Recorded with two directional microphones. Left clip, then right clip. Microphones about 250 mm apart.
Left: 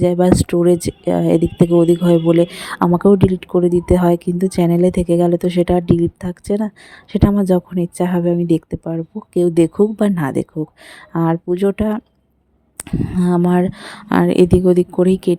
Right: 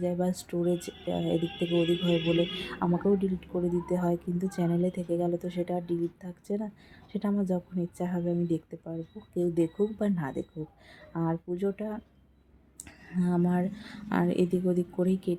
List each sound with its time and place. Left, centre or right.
0.0 s speech: left